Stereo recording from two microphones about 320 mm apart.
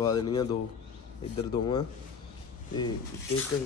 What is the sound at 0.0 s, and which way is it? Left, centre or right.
Speech, centre.